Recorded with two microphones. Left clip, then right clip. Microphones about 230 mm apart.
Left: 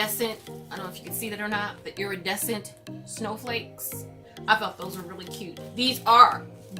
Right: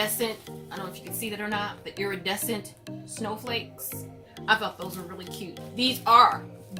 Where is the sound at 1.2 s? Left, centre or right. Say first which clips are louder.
Left 1 dB; centre.